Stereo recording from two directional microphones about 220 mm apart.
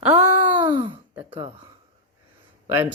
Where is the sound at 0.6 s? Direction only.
20° right (ahead or behind).